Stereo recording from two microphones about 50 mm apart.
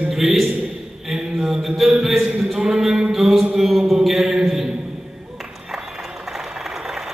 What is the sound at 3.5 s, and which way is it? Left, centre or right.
Mantra, centre.